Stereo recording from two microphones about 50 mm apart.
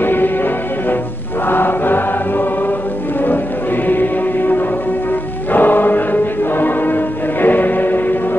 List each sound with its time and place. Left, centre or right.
0.0 s music: left
1.5 s choir: left
3.2 s music: left